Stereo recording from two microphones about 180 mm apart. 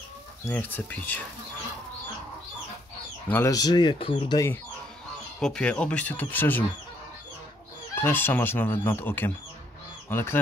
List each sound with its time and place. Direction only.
0.5 s speech: 10° left (ahead or behind)
3.3 s speech: 15° left (ahead or behind)
5.4 s speech: 5° left (ahead or behind)
7.9 s speech: 10° left (ahead or behind)